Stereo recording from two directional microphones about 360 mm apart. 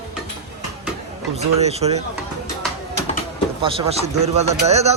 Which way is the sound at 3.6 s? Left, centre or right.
Centre.